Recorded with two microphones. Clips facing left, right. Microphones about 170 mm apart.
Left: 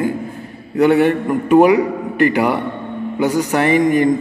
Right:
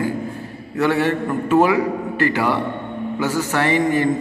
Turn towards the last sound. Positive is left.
turn(degrees=15)  # may be behind; listen again after turning